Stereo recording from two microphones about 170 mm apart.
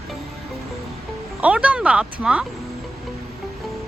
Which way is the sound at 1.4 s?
5° right (ahead or behind).